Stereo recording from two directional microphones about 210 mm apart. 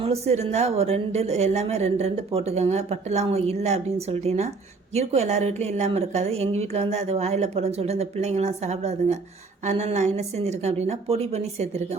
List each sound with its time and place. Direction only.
0.0 s a woman's voice: 30° right (ahead or behind)